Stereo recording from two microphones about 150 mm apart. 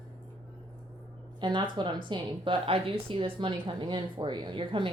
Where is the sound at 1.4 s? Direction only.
30° right (ahead or behind).